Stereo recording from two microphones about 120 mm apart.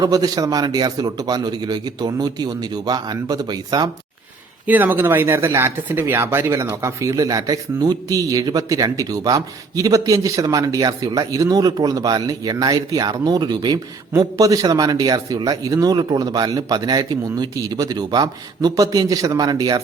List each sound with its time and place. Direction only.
0.0 s speech: 35° right (ahead or behind)
4.6 s speech: 15° right (ahead or behind); by 19.8 s 30° right (ahead or behind)